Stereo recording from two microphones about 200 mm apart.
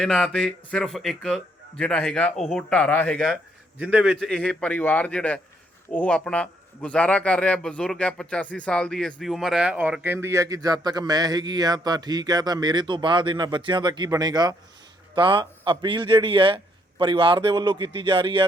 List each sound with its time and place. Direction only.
0.0 s a man's voice: 5° left (ahead or behind); by 18.4 s 25° right (ahead or behind)